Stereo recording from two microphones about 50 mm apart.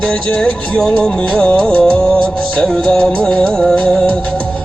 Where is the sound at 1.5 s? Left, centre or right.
Left.